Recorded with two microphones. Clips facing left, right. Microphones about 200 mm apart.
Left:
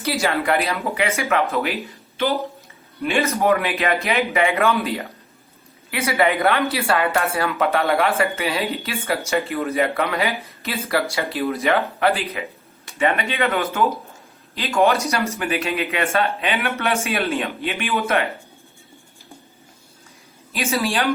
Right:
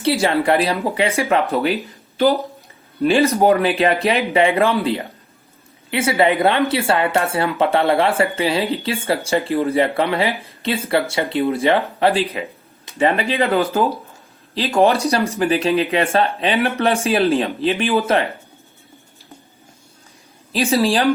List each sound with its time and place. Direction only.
0.0 s speech: 30° right (ahead or behind)
20.5 s speech: 30° right (ahead or behind)